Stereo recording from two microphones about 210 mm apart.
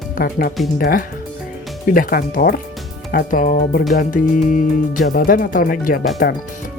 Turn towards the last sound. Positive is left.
turn(degrees=45)  # may be behind; listen again after turning